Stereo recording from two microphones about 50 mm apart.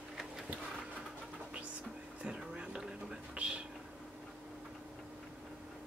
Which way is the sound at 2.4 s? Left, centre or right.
Centre.